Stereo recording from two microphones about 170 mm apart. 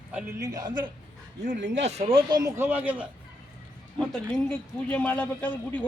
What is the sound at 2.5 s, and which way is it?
Speech, 10° right (ahead or behind).